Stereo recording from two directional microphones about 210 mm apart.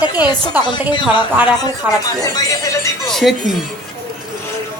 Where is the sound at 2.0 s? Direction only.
15° left (ahead or behind).